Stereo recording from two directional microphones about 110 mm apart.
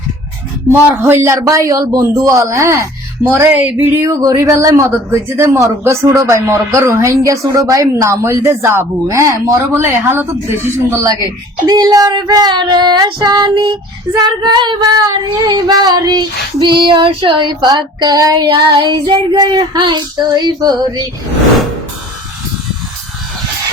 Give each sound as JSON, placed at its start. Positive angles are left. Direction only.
{"t": 0.7, "sound": "speech", "side_deg": -20}
{"t": 9.7, "sound": "speech", "side_deg": -20}
{"t": 11.6, "sound": "child singing", "side_deg": -35}